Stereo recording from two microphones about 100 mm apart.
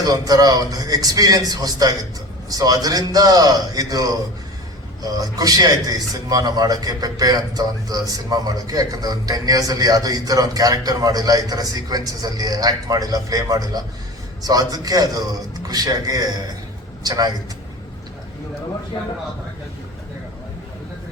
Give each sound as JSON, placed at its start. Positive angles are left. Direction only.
{"t": 0.0, "sound": "a man's voice", "side_deg": -40}